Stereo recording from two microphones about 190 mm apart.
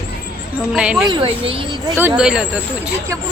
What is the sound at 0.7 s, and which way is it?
Speech, 5° right (ahead or behind).